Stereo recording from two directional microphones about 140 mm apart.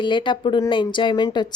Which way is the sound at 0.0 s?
35° left (ahead or behind).